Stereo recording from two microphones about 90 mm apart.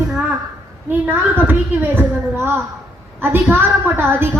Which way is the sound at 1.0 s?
20° right (ahead or behind).